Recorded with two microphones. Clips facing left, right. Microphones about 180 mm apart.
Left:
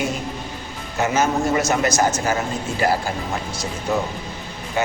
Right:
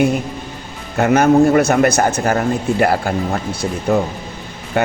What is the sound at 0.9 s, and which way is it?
A man's voice, 60° right (ahead or behind).